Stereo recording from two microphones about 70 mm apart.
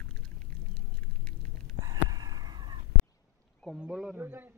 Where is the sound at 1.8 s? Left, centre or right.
Right.